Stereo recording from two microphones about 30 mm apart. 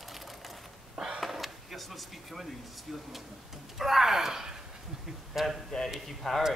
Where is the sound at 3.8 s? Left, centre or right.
Centre.